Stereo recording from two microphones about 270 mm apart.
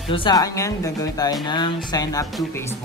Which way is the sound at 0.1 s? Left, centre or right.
Centre.